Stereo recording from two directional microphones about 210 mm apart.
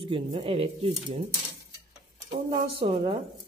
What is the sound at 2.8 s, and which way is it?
Speech, 25° right (ahead or behind).